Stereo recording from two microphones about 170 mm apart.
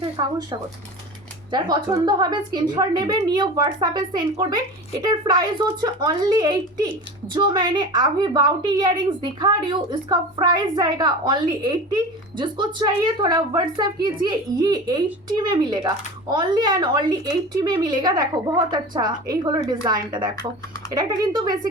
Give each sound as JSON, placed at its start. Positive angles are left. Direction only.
{"t": 0.2, "sound": "a woman's voice", "side_deg": -25}